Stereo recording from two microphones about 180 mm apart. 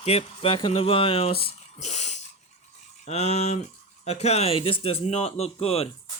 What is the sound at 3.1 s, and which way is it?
Speech, 35° left (ahead or behind).